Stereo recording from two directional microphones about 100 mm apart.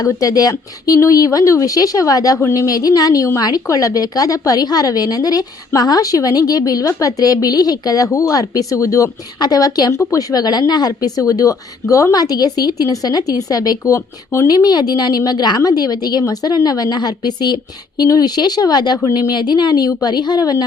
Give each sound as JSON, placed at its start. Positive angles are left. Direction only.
{"t": 0.0, "sound": "a woman's voice", "side_deg": 35}
{"t": 9.9, "sound": "a woman's voice", "side_deg": 30}